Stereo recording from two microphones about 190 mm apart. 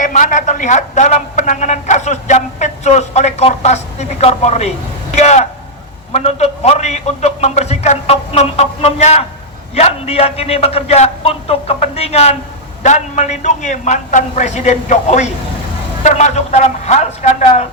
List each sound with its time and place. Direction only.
0.0 s a man's voice: 40° left (ahead or behind)